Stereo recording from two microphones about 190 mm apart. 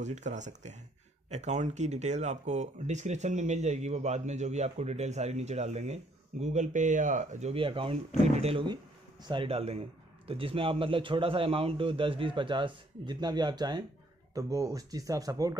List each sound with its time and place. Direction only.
0.0 s a man's voice: 40° right (ahead or behind); by 15.5 s 20° right (ahead or behind)